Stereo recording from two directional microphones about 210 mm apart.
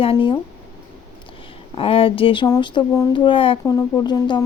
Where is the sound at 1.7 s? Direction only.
25° left (ahead or behind).